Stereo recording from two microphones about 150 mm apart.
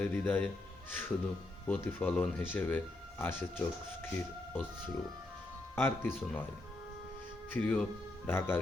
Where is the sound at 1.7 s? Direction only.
10° left (ahead or behind).